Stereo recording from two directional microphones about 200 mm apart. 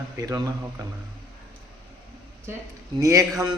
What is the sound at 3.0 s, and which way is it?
Speech, 15° right (ahead or behind).